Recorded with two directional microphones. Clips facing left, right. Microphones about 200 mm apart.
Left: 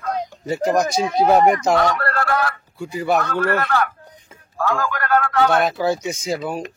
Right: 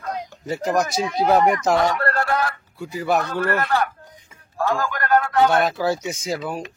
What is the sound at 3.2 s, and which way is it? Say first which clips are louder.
Speech: left 2 dB; 20° right (ahead or behind).